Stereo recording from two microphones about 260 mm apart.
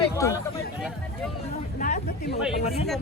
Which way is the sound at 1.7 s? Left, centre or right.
Left.